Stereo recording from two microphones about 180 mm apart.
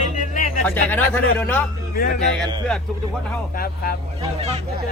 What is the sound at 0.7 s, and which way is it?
Speech, 10° left (ahead or behind).